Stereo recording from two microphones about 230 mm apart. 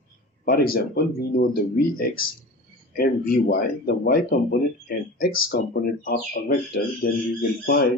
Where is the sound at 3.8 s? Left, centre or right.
Left.